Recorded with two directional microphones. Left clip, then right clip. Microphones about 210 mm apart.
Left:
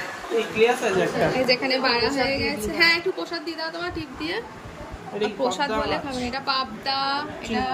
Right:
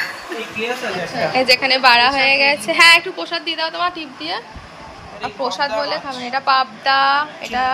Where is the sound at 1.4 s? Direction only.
5° left (ahead or behind).